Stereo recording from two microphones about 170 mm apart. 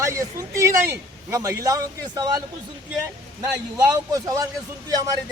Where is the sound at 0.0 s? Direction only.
15° right (ahead or behind).